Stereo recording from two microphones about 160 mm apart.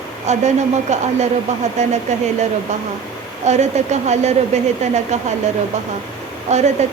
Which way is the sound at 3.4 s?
45° right (ahead or behind).